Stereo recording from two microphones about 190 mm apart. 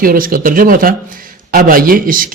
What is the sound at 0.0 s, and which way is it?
A man's voice, 50° right (ahead or behind).